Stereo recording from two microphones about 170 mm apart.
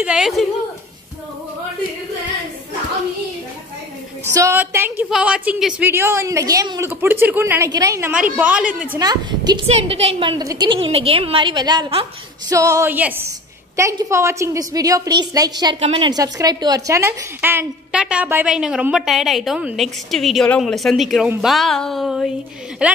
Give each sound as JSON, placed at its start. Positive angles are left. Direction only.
{"t": 0.0, "sound": "a woman's voice", "side_deg": -5}
{"t": 4.3, "sound": "a woman's voice", "side_deg": -15}
{"t": 9.0, "sound": "a woman's voice", "side_deg": -25}
{"t": 9.8, "sound": "a woman's voice", "side_deg": -35}
{"t": 10.4, "sound": "a woman's voice", "side_deg": -20}
{"t": 12.4, "sound": "a woman's voice", "side_deg": -20}